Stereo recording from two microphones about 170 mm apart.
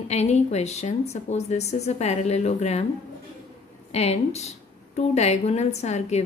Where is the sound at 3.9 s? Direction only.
40° left (ahead or behind).